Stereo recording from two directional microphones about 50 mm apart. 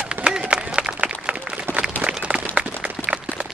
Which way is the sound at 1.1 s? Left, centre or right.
Right.